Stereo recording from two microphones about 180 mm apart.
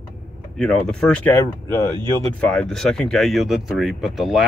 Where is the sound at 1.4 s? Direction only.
15° left (ahead or behind).